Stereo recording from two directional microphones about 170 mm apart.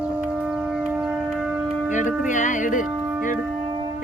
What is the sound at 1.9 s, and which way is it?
Music, 45° left (ahead or behind).